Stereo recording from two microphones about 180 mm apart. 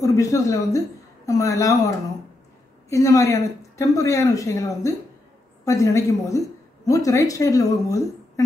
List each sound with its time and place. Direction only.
0.0 s a woman's voice: 20° left (ahead or behind)
2.9 s a woman's voice: 15° left (ahead or behind)